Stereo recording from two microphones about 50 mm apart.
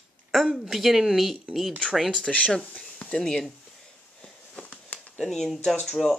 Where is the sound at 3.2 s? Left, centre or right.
Centre.